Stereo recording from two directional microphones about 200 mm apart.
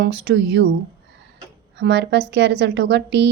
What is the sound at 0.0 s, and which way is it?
Speech, 60° right (ahead or behind).